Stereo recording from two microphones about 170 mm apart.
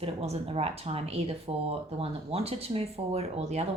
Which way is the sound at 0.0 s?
35° right (ahead or behind).